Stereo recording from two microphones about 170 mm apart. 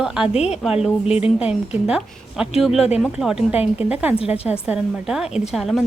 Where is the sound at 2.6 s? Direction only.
Centre (ahead or behind).